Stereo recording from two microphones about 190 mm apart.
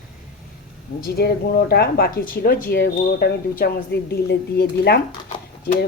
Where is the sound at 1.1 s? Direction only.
55° left (ahead or behind).